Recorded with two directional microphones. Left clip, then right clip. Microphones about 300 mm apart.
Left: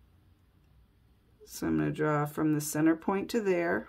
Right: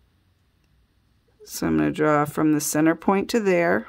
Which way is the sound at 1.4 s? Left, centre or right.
Right.